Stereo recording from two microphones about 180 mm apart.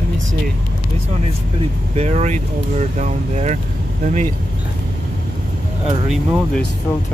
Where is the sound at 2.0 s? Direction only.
40° right (ahead or behind).